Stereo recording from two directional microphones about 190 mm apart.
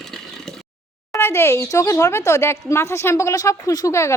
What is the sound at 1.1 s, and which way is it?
Speech, 10° left (ahead or behind).